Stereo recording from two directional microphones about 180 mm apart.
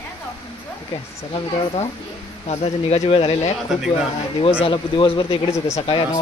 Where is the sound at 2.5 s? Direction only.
35° left (ahead or behind).